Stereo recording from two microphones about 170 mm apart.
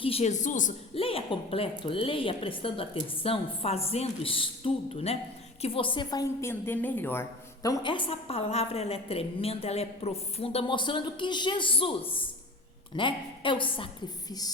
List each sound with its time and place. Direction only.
0.0 s a woman's voice: 35° left (ahead or behind)
0.9 s a woman's voice: 35° left (ahead or behind)
13.0 s a woman's voice: 30° left (ahead or behind)